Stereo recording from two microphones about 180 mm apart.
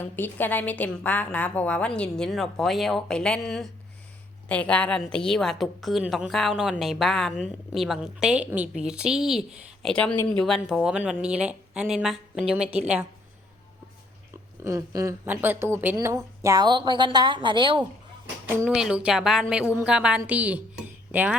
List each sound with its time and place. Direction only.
0.0 s a woman's voice: 10° left (ahead or behind); by 13.1 s 5° right (ahead or behind)
14.6 s a woman's voice: 20° right (ahead or behind)
18.4 s a woman's voice: 10° right (ahead or behind)